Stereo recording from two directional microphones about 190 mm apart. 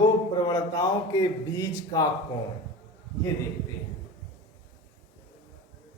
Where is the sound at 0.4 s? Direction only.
20° left (ahead or behind).